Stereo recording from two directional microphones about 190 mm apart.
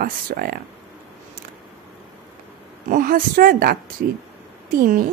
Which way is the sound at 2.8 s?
45° right (ahead or behind).